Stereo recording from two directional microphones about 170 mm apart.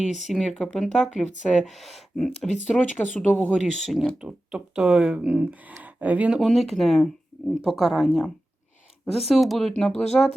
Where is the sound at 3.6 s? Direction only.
Centre (ahead or behind).